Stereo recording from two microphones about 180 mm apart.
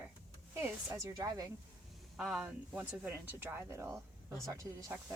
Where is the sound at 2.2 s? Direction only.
5° right (ahead or behind).